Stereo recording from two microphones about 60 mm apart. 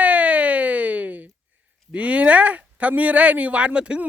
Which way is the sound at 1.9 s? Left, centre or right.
Right.